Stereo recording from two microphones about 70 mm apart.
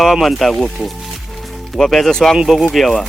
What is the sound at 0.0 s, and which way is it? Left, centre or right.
Speech, centre.